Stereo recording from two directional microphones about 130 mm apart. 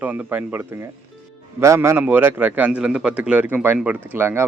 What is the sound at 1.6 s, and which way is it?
Speech, 20° right (ahead or behind).